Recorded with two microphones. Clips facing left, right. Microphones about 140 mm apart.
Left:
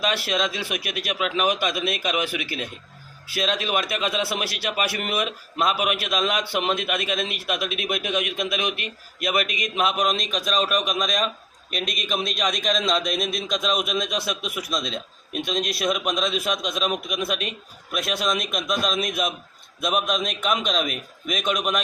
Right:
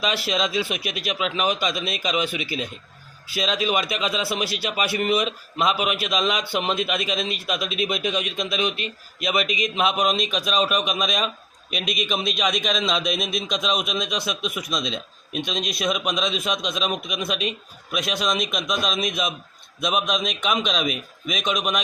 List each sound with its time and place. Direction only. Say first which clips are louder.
0.0 s a man's voice: even; centre (ahead or behind)
1.5 s a man's voice: left 1 dB; 60° left (ahead or behind)
2.0 s a man's voice: right 1 dB; 5° left (ahead or behind)
2.4 s a man's voice: right 2 dB; 60° left (ahead or behind)
3.3 s a man's voice: right 1 dB; centre (ahead or behind)
4.4 s a man's voice: right 2 dB; 60° left (ahead or behind)
4.6 s a man's voice: right 3 dB; centre (ahead or behind)
7.0 s a man's voice: right 1 dB; 55° left (ahead or behind)
8.4 s a man's voice: right 1 dB; 10° left (ahead or behind)